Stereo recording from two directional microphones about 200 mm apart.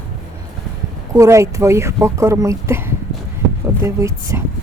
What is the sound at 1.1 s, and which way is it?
Speech, 15° right (ahead or behind).